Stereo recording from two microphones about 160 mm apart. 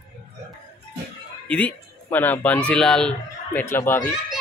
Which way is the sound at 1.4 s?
10° left (ahead or behind).